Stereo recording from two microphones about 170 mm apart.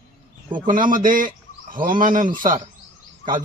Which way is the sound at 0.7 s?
55° right (ahead or behind).